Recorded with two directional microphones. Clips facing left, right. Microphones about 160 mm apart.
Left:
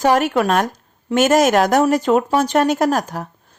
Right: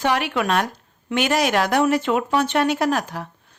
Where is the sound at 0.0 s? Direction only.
45° left (ahead or behind).